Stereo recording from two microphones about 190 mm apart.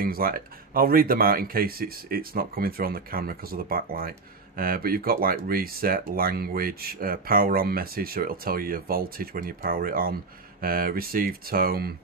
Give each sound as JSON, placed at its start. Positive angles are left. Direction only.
{"t": 0.0, "sound": "speech", "side_deg": -50}